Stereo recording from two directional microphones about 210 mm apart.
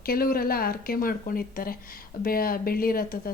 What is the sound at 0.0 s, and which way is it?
Speech, 45° left (ahead or behind).